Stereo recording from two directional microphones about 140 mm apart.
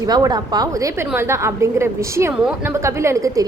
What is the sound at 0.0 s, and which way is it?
Speech, 25° right (ahead or behind).